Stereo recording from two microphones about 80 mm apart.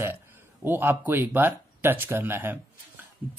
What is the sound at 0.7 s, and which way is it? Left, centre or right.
Speech, right.